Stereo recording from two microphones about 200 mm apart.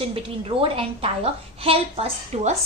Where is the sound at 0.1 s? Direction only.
25° right (ahead or behind).